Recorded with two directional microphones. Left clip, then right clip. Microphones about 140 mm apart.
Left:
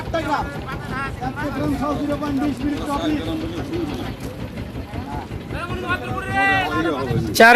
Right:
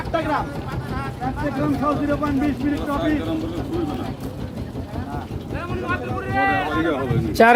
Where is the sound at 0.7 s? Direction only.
30° right (ahead or behind).